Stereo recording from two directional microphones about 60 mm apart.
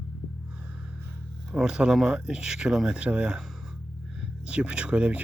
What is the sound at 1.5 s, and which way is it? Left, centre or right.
Speech, centre.